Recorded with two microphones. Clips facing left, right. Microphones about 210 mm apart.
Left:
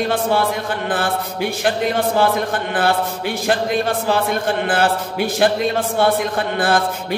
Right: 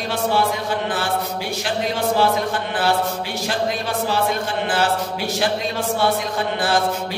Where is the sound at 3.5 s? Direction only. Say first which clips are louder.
Left 5 dB; 55° left (ahead or behind).